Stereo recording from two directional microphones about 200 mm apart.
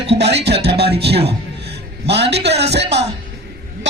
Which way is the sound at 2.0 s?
55° right (ahead or behind).